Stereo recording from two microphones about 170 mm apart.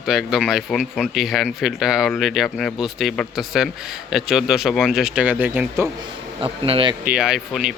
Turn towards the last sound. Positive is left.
turn(degrees=-5)  # may be behind; listen again after turning